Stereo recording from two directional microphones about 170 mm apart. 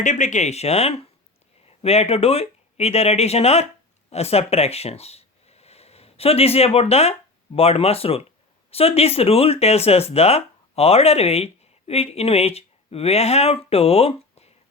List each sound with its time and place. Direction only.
0.0 s speech: 45° left (ahead or behind)